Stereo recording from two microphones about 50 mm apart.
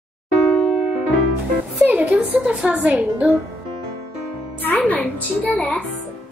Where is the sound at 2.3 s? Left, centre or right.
Right.